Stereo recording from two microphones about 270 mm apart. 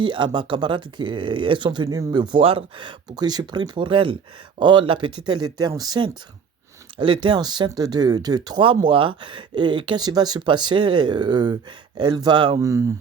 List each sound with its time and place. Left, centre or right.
0.0 s speech: centre